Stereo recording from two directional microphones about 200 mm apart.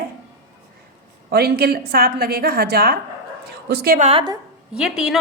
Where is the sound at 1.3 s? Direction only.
50° right (ahead or behind).